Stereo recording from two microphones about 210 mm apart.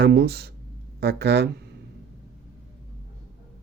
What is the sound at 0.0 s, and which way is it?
Speech, 50° right (ahead or behind).